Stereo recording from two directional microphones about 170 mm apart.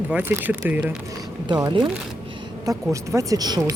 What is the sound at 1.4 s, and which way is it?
Speech, 25° right (ahead or behind).